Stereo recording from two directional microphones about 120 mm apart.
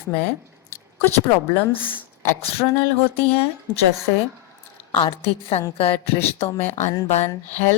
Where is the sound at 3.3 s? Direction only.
60° left (ahead or behind).